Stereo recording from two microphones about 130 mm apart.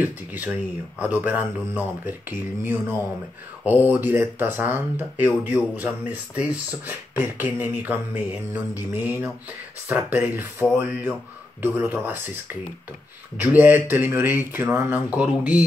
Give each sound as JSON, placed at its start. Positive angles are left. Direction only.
{"t": 0.0, "sound": "speech", "side_deg": -15}